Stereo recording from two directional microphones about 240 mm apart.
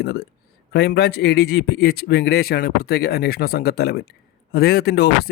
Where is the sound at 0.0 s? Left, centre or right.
Left.